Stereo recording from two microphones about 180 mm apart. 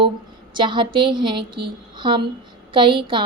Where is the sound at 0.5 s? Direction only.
25° right (ahead or behind).